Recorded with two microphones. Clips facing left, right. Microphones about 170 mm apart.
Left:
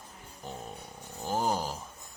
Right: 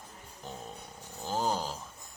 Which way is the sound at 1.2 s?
15° left (ahead or behind).